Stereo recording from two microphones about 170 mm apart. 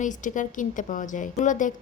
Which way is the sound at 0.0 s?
50° left (ahead or behind).